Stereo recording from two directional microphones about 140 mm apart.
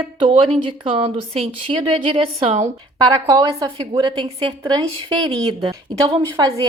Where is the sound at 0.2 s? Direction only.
35° right (ahead or behind).